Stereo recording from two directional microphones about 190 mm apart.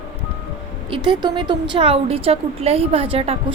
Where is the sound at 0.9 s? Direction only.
25° right (ahead or behind).